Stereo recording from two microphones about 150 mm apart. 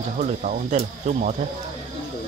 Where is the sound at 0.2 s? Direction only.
55° right (ahead or behind).